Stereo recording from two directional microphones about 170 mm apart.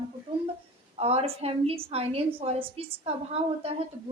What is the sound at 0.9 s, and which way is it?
A woman's voice, 35° right (ahead or behind).